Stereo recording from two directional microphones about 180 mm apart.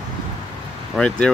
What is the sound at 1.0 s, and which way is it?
Speech, 5° left (ahead or behind).